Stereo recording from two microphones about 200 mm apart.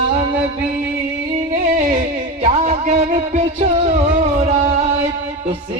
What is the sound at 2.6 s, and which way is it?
Music, 35° right (ahead or behind).